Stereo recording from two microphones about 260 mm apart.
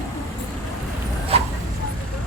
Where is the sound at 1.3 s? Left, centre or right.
Right.